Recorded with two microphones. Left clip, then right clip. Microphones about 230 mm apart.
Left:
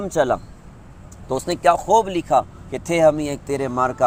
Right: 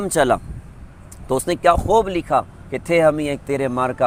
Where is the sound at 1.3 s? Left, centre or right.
Right.